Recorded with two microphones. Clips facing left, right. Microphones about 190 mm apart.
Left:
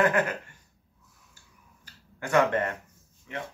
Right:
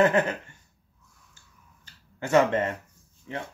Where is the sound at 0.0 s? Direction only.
25° right (ahead or behind).